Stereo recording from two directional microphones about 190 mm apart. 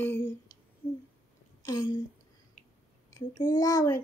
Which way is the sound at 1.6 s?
20° left (ahead or behind).